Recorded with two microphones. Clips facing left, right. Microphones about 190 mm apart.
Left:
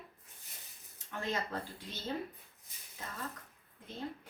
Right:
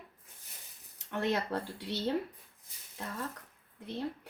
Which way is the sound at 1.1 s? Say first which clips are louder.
Right 6 dB; 70° right (ahead or behind).